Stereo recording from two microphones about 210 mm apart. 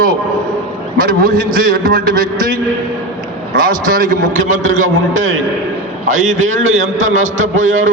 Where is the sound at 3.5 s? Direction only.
40° right (ahead or behind).